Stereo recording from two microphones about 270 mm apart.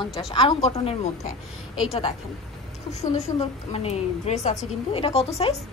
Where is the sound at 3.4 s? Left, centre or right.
Left.